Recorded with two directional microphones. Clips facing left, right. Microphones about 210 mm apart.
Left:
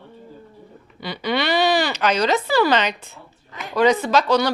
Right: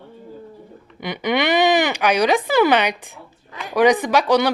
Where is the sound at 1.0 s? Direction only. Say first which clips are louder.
Right 3 dB; 20° right (ahead or behind).